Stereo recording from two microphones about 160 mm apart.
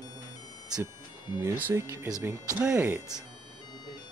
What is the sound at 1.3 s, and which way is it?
Speech, 15° right (ahead or behind).